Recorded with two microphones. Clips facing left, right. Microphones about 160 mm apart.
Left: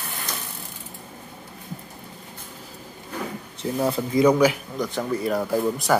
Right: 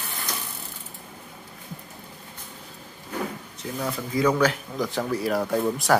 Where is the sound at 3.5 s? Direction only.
30° left (ahead or behind).